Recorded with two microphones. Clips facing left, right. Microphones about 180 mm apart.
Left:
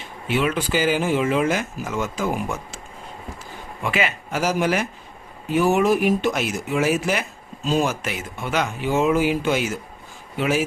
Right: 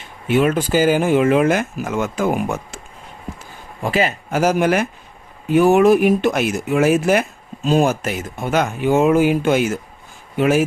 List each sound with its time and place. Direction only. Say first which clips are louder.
0.3 s speech: right 6 dB; 45° right (ahead or behind)
3.8 s speech: right 5 dB; 35° right (ahead or behind)